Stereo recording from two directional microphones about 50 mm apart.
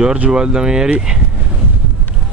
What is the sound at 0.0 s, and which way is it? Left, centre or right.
Speech, centre.